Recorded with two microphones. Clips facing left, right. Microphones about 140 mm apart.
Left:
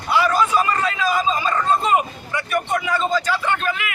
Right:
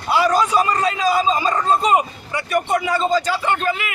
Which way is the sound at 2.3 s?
35° right (ahead or behind).